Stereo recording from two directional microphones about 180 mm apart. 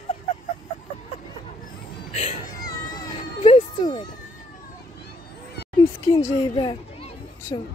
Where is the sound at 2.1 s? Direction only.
40° left (ahead or behind).